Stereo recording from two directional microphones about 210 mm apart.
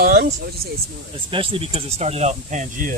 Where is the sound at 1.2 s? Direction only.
25° right (ahead or behind).